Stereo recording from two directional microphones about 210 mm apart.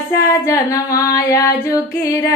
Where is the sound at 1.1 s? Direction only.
15° left (ahead or behind).